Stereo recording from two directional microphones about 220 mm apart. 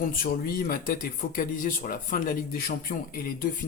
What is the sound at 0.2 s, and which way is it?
Speech, 40° left (ahead or behind).